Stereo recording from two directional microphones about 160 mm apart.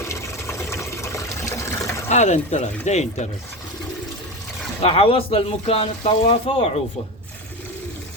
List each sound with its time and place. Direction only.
0.0 s water: 15° left (ahead or behind)
2.0 s speech: 45° left (ahead or behind)
4.8 s speech: 35° left (ahead or behind)